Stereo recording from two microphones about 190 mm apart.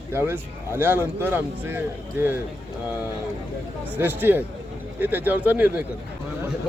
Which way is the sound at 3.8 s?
10° right (ahead or behind).